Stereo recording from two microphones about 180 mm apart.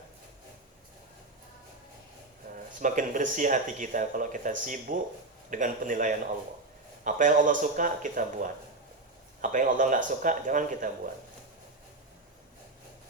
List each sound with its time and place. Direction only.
2.8 s speech: 45° right (ahead or behind)